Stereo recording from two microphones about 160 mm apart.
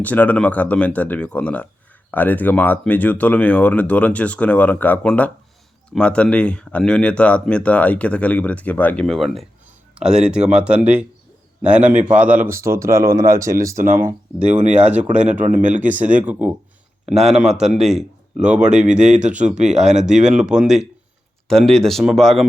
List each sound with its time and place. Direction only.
0.0 s speech: 10° left (ahead or behind); by 13.8 s 20° right (ahead or behind)
14.3 s speech: 10° right (ahead or behind)
14.9 s speech: 50° right (ahead or behind)
16.2 s speech: 10° right (ahead or behind)
18.9 s speech: 45° right (ahead or behind)
20.3 s speech: 5° right (ahead or behind)